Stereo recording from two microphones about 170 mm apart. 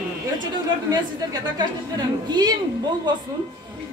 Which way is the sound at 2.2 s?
25° right (ahead or behind).